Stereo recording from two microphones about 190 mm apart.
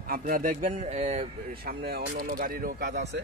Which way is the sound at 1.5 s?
55° right (ahead or behind).